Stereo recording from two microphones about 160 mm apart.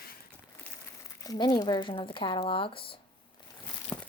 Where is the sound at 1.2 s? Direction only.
25° left (ahead or behind).